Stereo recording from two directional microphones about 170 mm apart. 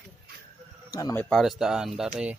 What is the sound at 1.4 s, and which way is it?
Speech, centre (ahead or behind).